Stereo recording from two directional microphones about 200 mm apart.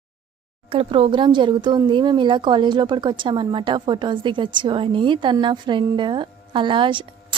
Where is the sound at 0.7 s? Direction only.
25° right (ahead or behind).